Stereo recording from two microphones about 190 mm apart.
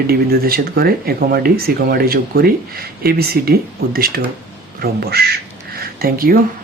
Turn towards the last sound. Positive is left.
turn(degrees=-50)  # may be behind; listen again after turning